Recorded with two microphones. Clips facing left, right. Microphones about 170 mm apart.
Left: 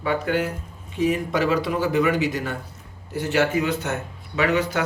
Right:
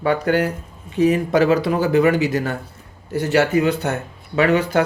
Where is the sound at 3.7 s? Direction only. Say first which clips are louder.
Right 5 dB; 65° right (ahead or behind).